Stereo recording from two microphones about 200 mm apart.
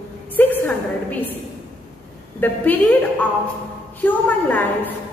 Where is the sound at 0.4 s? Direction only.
10° left (ahead or behind).